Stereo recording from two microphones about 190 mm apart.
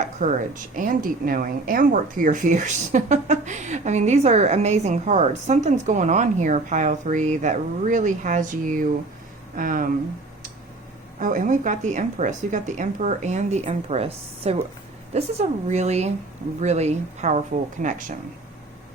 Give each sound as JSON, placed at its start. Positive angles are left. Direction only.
{"t": 0.0, "sound": "a sound", "side_deg": -40}
{"t": 0.8, "sound": "a woman's voice", "side_deg": -45}
{"t": 11.2, "sound": "a woman's voice", "side_deg": -45}